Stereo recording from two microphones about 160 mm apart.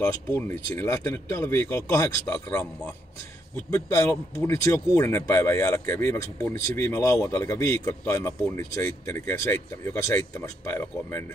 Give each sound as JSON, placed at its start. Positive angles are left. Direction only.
{"t": 0.0, "sound": "speech", "side_deg": 10}
{"t": 3.7, "sound": "speech", "side_deg": 15}